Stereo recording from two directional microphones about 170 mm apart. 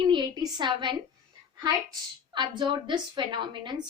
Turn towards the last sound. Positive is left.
turn(degrees=-25)  # may be behind; listen again after turning